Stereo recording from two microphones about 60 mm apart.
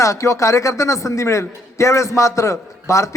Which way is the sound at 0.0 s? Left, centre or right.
Left.